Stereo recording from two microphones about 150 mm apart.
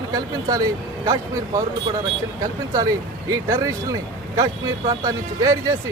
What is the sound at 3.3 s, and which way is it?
A man's voice, 20° right (ahead or behind).